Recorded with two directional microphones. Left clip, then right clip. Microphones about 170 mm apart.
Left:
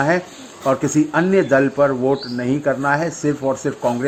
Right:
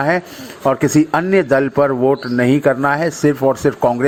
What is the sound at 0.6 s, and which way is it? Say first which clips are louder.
Speech: right 3 dB; 30° right (ahead or behind).